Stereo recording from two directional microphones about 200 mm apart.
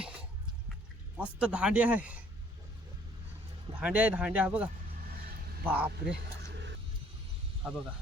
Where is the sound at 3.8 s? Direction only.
5° right (ahead or behind).